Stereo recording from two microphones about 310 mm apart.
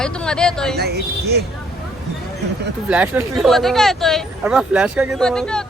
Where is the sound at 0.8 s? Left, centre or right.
Right.